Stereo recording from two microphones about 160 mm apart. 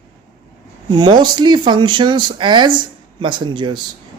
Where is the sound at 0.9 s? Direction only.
30° right (ahead or behind).